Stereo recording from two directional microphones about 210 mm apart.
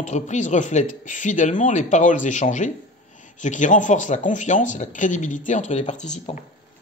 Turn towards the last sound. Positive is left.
turn(degrees=35)  # may be behind; listen again after turning